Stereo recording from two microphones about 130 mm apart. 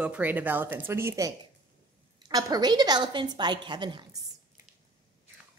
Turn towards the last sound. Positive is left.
turn(degrees=-35)  # may be behind; listen again after turning